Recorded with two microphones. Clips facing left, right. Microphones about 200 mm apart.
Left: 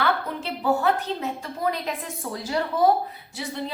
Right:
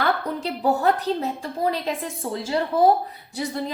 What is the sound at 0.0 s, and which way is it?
A woman's voice, 40° right (ahead or behind).